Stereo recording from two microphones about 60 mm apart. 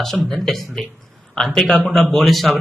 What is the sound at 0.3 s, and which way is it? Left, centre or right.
A man's voice, centre.